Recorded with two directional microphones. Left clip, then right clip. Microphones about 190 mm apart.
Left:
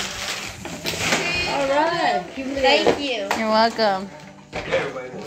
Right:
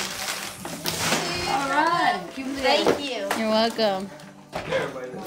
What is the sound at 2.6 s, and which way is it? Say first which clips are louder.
Speech: left 4 dB; 25° right (ahead or behind).